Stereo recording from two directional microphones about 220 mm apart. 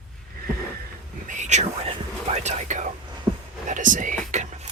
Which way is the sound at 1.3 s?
30° right (ahead or behind).